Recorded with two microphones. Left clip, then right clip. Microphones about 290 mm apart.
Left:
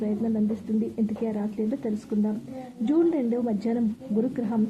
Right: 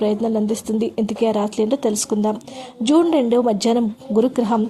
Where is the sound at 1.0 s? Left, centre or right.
Right.